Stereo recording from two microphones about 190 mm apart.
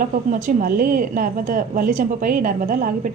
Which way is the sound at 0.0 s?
45° right (ahead or behind).